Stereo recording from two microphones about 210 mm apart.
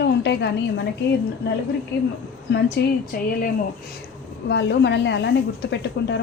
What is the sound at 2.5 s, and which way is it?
Speech, 50° left (ahead or behind).